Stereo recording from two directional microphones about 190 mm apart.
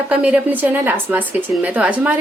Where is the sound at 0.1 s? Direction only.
5° right (ahead or behind).